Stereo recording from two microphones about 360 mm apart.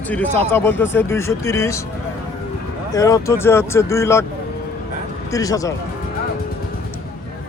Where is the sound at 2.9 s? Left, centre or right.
Centre.